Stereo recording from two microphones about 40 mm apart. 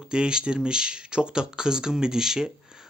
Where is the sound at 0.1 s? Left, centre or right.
Right.